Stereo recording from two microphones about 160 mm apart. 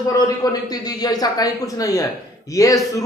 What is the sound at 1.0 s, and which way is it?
A man's voice, 25° left (ahead or behind).